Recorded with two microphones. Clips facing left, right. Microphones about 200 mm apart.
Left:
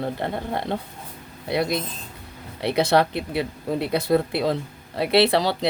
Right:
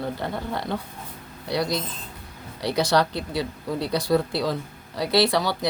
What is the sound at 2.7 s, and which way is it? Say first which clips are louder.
Speech: left 2 dB; 60° left (ahead or behind).